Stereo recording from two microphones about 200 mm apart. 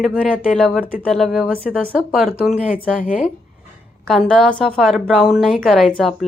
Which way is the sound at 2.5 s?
40° left (ahead or behind).